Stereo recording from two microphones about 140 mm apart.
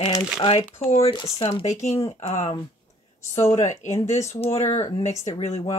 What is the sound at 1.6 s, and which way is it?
Speech, 55° left (ahead or behind).